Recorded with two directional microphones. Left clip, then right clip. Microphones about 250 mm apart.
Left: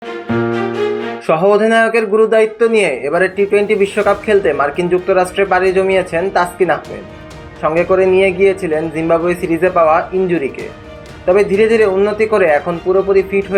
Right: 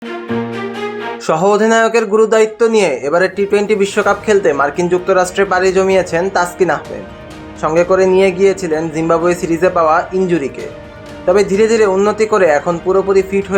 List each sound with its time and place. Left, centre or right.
1.3 s speech: centre